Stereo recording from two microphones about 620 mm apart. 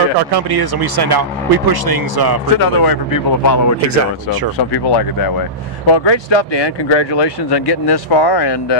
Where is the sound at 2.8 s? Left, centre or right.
Left.